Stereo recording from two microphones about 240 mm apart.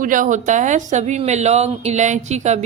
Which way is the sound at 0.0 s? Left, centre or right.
Right.